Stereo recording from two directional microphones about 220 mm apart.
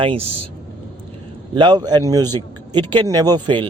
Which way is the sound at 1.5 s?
20° right (ahead or behind).